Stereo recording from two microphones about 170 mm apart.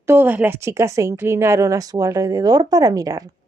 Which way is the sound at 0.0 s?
15° right (ahead or behind).